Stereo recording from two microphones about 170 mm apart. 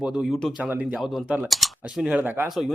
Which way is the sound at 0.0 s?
5° right (ahead or behind).